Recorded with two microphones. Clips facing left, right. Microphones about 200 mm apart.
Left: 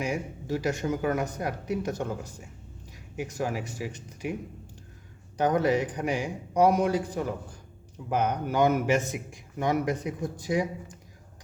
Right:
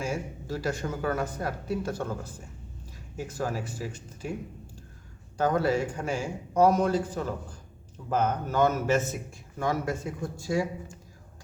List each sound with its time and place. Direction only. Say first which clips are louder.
0.0 s a man's voice: left 1 dB; 15° left (ahead or behind)
5.4 s a man's voice: left 1 dB; 15° left (ahead or behind)